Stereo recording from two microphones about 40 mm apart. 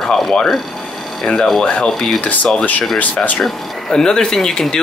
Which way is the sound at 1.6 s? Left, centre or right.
Left.